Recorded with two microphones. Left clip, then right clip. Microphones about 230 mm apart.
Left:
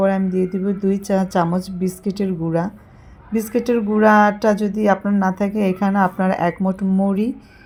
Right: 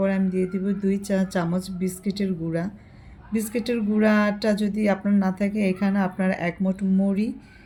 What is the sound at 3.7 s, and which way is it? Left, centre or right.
A woman's voice, centre.